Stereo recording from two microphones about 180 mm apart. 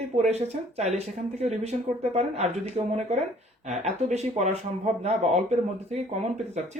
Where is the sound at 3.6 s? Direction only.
40° right (ahead or behind).